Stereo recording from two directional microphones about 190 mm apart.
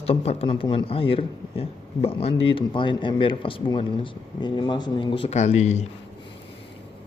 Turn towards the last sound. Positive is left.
turn(degrees=35)  # may be behind; listen again after turning